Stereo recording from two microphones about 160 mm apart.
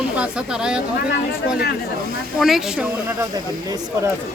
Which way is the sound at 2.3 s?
Centre (ahead or behind).